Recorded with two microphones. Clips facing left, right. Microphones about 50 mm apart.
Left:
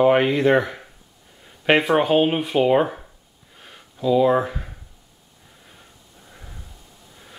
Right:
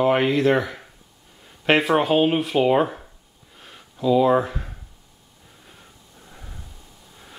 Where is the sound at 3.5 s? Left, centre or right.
Centre.